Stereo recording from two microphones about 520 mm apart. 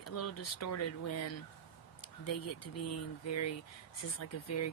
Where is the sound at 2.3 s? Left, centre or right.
Left.